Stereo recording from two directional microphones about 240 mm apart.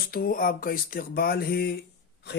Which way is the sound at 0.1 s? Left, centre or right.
Left.